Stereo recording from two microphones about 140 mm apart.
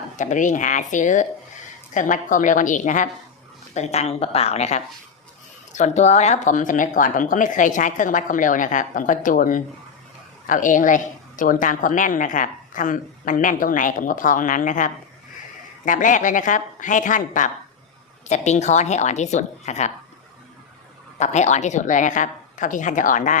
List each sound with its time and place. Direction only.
0.2 s a woman's voice: 65° left (ahead or behind)
3.8 s a woman's voice: 50° left (ahead or behind); by 17.5 s 65° left (ahead or behind)
18.3 s speech: 55° left (ahead or behind)
21.2 s speech: 55° left (ahead or behind)